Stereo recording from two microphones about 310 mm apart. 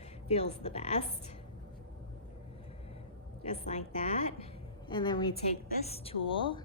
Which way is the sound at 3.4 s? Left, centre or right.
Left.